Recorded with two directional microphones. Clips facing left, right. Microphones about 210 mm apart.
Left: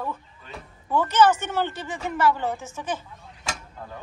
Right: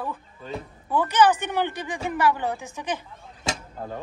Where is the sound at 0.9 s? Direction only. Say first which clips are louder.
Even; 15° right (ahead or behind).